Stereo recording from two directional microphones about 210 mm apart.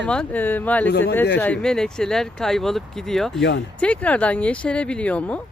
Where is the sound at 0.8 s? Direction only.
55° left (ahead or behind).